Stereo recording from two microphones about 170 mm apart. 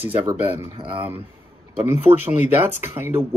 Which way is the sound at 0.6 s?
35° right (ahead or behind).